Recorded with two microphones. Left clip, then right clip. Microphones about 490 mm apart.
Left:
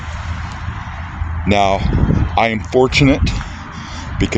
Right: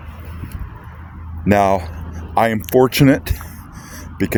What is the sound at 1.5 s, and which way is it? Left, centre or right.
Speech, right.